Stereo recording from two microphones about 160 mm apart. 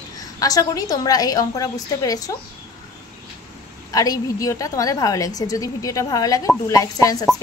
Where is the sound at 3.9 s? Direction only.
20° left (ahead or behind).